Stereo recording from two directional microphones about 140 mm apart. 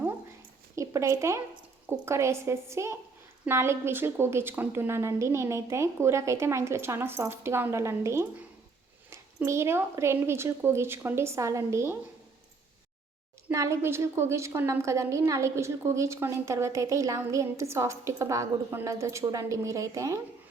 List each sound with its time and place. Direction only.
0.8 s a woman's voice: 20° right (ahead or behind)
13.5 s a woman's voice: 20° right (ahead or behind)